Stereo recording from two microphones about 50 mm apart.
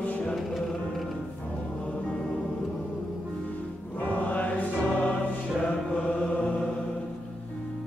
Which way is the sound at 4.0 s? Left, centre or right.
Left.